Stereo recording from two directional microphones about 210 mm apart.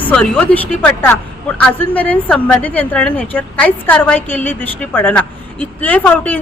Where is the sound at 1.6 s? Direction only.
5° left (ahead or behind).